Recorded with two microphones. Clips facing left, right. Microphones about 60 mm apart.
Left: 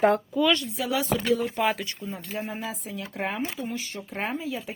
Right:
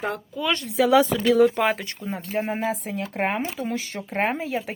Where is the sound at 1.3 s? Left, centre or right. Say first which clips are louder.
Right 9 dB; right.